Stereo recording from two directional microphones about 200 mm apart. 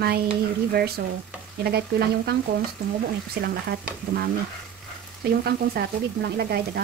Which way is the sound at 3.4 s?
55° right (ahead or behind).